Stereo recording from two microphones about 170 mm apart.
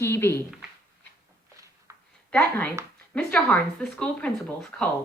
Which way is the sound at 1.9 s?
15° right (ahead or behind).